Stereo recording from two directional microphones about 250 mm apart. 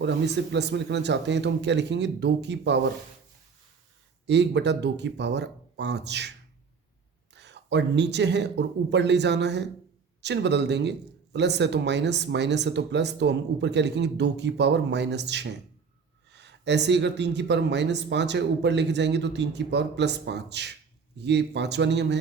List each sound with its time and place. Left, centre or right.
0.0 s speech: right
4.3 s speech: right
7.3 s speech: right